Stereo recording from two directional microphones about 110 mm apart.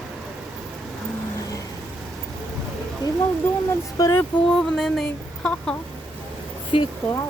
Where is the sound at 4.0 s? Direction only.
35° left (ahead or behind).